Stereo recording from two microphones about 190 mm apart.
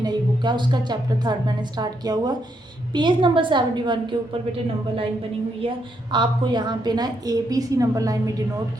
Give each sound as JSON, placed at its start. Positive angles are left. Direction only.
{"t": 0.0, "sound": "a woman's voice", "side_deg": -25}
{"t": 5.6, "sound": "a woman's voice", "side_deg": -25}